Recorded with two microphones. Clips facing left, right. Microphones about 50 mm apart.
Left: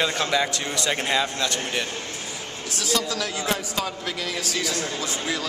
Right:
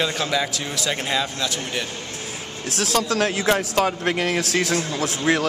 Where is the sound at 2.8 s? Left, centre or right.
Right.